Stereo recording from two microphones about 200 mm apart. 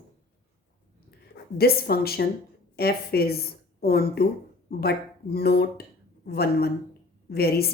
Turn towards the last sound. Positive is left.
turn(degrees=50)  # may be behind; listen again after turning